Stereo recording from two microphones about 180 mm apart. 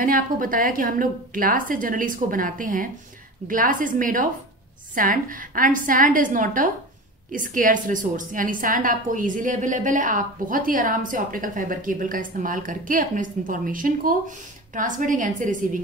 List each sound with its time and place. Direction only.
0.0 s a woman's voice: 50° right (ahead or behind)